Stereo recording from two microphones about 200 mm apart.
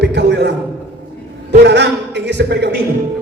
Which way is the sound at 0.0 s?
60° right (ahead or behind).